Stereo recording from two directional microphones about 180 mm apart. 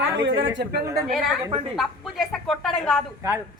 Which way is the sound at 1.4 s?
25° right (ahead or behind).